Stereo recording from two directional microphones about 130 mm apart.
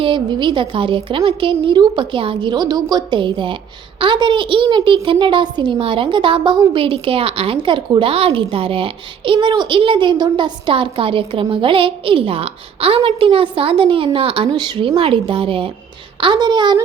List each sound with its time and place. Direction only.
0.0 s a woman's voice: 40° right (ahead or behind)